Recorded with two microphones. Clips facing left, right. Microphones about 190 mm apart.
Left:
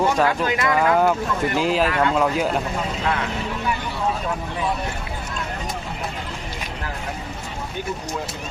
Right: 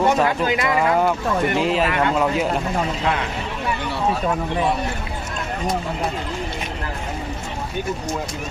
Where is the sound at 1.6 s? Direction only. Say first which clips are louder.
Even; centre (ahead or behind).